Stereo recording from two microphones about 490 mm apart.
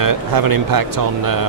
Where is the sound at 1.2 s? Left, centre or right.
Right.